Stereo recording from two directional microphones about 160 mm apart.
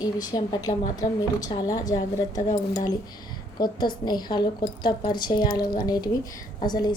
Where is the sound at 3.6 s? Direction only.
25° left (ahead or behind).